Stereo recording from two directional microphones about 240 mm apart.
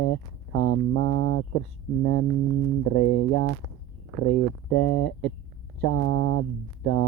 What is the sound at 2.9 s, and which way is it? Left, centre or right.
Music, left.